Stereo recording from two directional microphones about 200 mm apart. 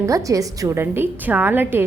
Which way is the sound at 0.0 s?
15° right (ahead or behind).